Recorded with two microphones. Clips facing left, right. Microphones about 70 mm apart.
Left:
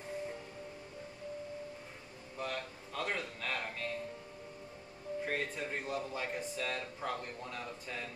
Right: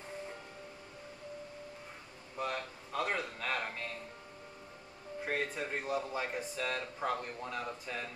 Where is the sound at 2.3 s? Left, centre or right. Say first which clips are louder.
Right 2 dB; centre.